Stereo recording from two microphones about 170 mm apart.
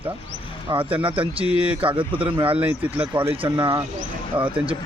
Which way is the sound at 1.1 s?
30° right (ahead or behind).